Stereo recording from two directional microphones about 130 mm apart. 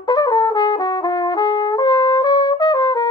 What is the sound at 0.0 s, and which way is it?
Trumpet, 30° left (ahead or behind).